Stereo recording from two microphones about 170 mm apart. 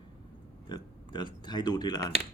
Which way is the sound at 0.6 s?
25° left (ahead or behind).